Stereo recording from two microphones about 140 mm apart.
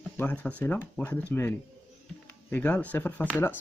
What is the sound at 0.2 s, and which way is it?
A man's voice, 10° left (ahead or behind).